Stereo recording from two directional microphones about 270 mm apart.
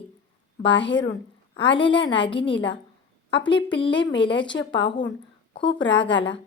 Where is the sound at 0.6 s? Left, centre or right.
Left.